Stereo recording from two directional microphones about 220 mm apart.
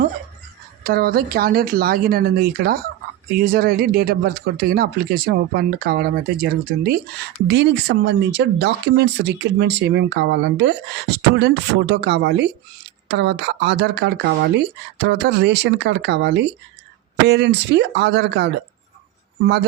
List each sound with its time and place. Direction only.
0.9 s speech: 45° right (ahead or behind)